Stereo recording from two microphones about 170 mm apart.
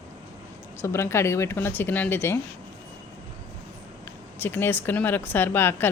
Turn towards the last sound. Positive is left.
turn(degrees=10)  # may be behind; listen again after turning